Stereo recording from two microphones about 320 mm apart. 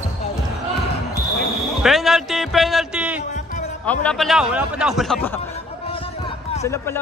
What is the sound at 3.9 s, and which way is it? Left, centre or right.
A man's voice, centre.